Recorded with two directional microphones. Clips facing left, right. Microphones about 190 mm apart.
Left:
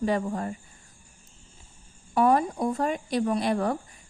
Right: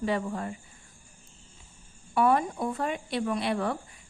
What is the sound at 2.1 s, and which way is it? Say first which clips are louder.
Speech: left 2 dB; 40° left (ahead or behind).